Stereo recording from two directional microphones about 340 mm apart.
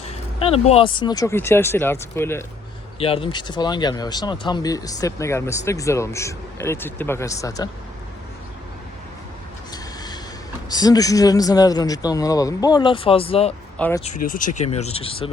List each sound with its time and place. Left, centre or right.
0.4 s speech: centre
9.7 s a sound: centre
10.7 s speech: centre
13.7 s speech: centre
14.3 s speech: left